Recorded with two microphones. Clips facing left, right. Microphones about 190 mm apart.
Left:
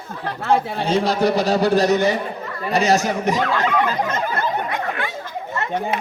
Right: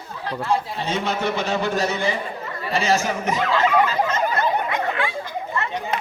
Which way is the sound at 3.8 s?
55° left (ahead or behind).